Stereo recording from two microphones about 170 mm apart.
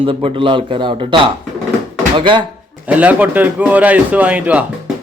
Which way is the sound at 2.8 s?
10° right (ahead or behind).